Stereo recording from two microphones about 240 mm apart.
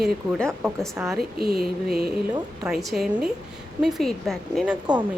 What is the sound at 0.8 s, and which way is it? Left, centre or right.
Speech, centre.